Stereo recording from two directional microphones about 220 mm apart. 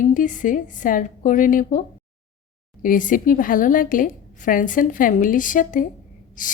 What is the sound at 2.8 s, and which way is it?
A woman's voice, 35° left (ahead or behind).